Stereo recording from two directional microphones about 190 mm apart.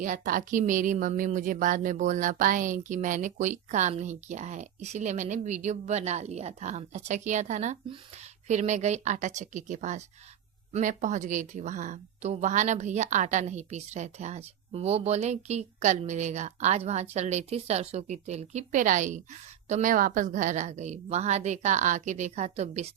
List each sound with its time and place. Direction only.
0.0 s speech: 45° right (ahead or behind)